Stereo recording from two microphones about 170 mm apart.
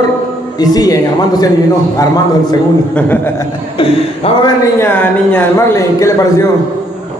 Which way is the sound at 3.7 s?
30° left (ahead or behind).